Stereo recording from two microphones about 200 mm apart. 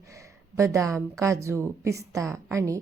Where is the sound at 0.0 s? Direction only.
15° right (ahead or behind).